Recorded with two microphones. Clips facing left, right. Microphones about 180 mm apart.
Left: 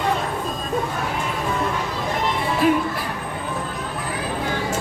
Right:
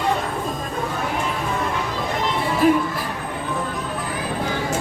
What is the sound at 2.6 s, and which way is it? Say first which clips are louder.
Speech: right 2 dB; 45° right (ahead or behind).